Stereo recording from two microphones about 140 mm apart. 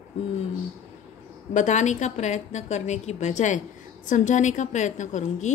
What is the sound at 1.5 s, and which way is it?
A woman's voice, 60° left (ahead or behind).